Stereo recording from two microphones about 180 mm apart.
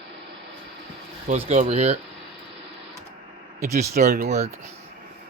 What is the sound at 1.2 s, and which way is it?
Speech, 35° right (ahead or behind).